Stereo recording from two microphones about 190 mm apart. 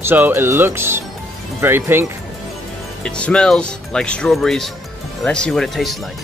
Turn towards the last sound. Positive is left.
turn(degrees=0)  # may be behind; listen again after turning